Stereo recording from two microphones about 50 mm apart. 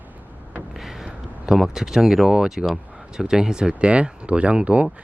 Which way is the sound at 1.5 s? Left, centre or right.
Centre.